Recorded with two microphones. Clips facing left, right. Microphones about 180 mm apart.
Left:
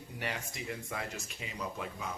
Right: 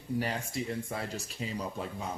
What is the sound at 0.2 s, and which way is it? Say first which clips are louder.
Speech: right 3 dB; 35° right (ahead or behind).